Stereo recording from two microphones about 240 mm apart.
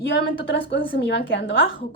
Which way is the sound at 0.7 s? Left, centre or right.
Left.